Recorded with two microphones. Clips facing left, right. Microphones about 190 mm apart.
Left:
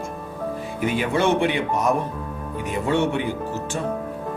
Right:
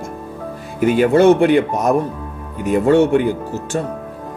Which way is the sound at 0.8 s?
45° right (ahead or behind).